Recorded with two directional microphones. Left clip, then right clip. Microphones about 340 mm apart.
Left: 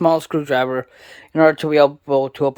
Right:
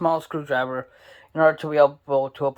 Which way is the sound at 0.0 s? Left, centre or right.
Left.